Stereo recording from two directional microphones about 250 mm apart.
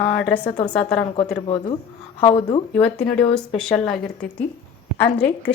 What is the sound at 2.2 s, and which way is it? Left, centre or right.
Speech, left.